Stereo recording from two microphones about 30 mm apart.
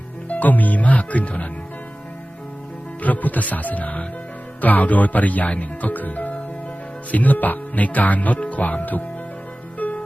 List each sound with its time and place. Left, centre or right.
0.3 s speech: left
3.0 s speech: left
9.7 s music: left